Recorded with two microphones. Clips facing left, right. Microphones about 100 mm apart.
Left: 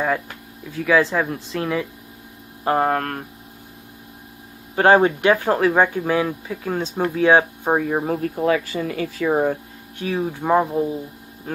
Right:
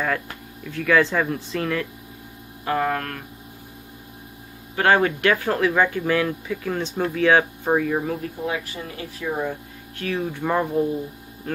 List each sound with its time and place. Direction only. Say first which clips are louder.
0.7 s speech: left 1 dB; 5° left (ahead or behind)
2.6 s speech: left 4 dB; 35° left (ahead or behind)
4.7 s speech: left 4 dB; 25° left (ahead or behind)
7.7 s speech: left 1 dB; 35° left (ahead or behind)
8.4 s speech: left 8 dB; 90° left
9.9 s speech: left 2 dB; 15° left (ahead or behind)